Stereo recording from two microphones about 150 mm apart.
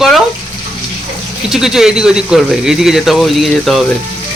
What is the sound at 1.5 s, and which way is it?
Speech, 5° right (ahead or behind).